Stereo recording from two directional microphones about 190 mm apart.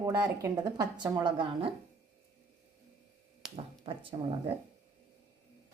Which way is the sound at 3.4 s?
5° right (ahead or behind).